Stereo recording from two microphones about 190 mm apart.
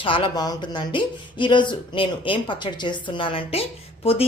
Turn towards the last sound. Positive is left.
turn(degrees=30)  # may be behind; listen again after turning